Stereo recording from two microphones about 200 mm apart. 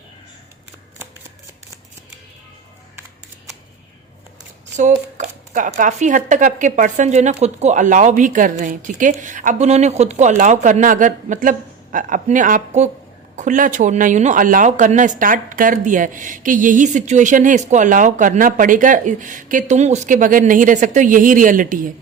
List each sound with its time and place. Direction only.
4.8 s speech: 35° right (ahead or behind)